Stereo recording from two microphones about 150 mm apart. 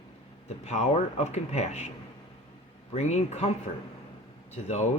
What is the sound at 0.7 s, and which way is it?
Speech, 50° left (ahead or behind).